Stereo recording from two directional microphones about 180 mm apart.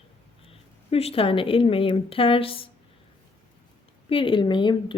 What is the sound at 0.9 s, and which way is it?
A woman's voice, 35° left (ahead or behind).